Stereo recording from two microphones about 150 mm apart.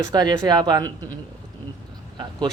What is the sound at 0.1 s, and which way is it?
Speech, 30° right (ahead or behind).